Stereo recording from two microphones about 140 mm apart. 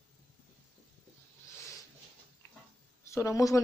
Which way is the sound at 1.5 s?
20° left (ahead or behind).